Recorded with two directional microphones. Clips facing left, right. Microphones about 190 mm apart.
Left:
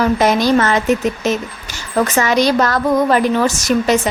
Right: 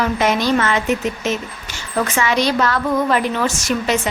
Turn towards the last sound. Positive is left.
turn(degrees=40)  # may be behind; listen again after turning